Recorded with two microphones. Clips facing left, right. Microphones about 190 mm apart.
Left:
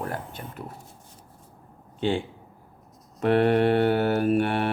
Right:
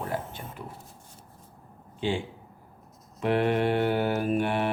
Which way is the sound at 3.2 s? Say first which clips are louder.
Left 4 dB; 55° left (ahead or behind).